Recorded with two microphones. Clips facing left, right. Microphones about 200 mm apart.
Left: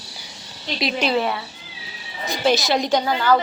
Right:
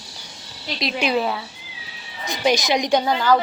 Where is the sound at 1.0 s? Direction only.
5° right (ahead or behind).